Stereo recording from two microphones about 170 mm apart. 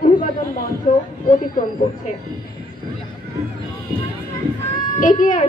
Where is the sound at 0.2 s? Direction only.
50° left (ahead or behind).